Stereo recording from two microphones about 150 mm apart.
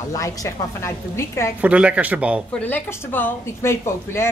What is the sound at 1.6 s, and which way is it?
Speech, 10° right (ahead or behind).